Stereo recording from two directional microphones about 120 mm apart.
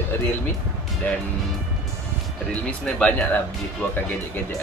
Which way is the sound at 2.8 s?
10° left (ahead or behind).